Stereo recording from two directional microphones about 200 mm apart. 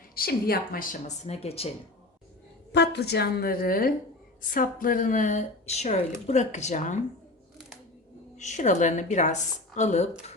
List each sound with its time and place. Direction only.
0.1 s speech: 50° left (ahead or behind); by 1.7 s 30° left (ahead or behind)
2.7 s a woman's voice: 55° left (ahead or behind); by 7.0 s 35° left (ahead or behind)
8.4 s a woman's voice: 35° left (ahead or behind)